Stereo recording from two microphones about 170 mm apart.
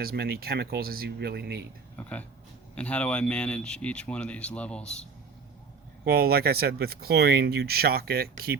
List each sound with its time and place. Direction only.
0.0 s speech: 65° right (ahead or behind)
2.0 s speech: 10° left (ahead or behind)
6.1 s speech: 65° right (ahead or behind)